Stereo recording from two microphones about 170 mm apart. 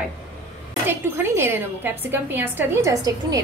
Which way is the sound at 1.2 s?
15° right (ahead or behind).